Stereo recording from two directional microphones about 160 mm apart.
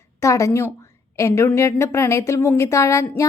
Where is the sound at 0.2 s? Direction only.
20° left (ahead or behind).